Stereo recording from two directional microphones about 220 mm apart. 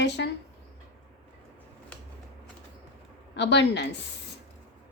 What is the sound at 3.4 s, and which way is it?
Speech, 50° left (ahead or behind).